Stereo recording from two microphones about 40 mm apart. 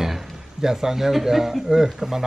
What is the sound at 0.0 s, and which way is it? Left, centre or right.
A man's voice, centre.